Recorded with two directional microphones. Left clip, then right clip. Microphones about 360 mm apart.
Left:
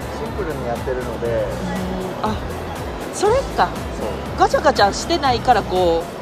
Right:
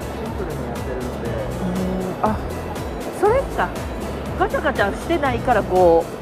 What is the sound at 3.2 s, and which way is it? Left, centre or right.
Music, centre.